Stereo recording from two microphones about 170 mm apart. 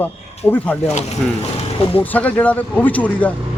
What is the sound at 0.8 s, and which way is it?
Speech, 40° left (ahead or behind).